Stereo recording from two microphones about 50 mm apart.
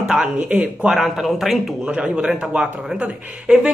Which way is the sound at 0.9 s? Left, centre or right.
Centre.